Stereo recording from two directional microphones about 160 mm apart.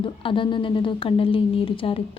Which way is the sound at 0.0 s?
35° left (ahead or behind).